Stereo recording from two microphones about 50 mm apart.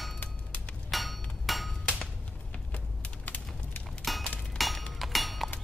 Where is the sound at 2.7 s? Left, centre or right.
Left.